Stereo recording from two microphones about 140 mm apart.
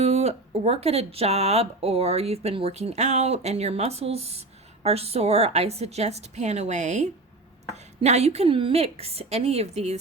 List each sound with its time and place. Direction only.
0.0 s speech: 50° right (ahead or behind)